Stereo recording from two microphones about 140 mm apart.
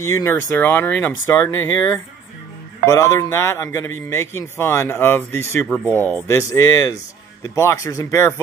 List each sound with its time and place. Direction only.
0.0 s speech: 20° left (ahead or behind)
2.9 s speech: 25° left (ahead or behind)